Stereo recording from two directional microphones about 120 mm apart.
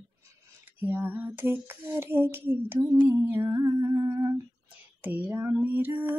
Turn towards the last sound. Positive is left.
turn(degrees=-15)  # may be behind; listen again after turning